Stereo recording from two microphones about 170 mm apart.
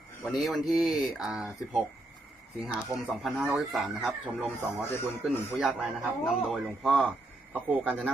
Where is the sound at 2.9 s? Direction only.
15° right (ahead or behind).